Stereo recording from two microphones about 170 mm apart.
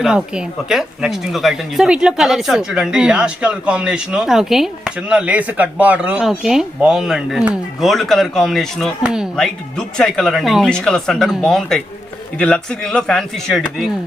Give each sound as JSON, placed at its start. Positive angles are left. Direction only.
{"t": 0.0, "sound": "speech", "side_deg": -5}